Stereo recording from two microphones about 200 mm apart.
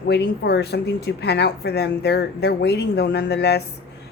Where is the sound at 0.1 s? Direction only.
55° left (ahead or behind).